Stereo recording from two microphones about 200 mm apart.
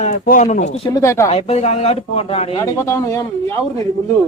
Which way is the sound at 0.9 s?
15° left (ahead or behind).